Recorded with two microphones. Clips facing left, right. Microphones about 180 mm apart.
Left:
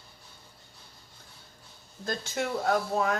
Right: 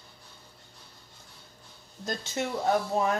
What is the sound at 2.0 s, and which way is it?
Speech, 25° right (ahead or behind).